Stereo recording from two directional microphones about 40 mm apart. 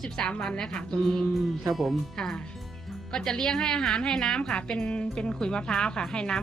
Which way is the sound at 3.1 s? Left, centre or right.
Centre.